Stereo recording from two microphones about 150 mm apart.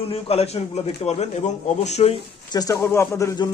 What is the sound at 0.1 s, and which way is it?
A man's voice, 45° left (ahead or behind).